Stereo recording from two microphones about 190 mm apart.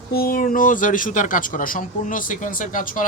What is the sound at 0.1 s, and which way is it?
Speech, 50° left (ahead or behind).